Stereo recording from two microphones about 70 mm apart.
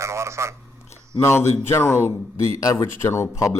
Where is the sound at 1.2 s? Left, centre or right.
Left.